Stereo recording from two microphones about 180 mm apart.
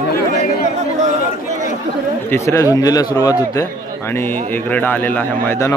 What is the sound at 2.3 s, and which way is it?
A man's voice, 15° left (ahead or behind).